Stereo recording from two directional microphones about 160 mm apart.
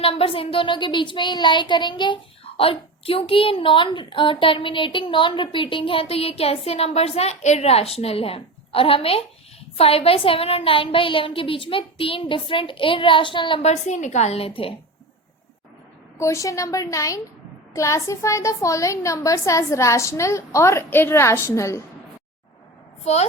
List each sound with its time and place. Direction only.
0.0 s speech: 35° left (ahead or behind)
16.1 s a woman's voice: 20° left (ahead or behind)